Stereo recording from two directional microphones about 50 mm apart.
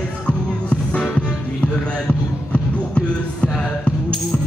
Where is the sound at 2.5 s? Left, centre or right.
Left.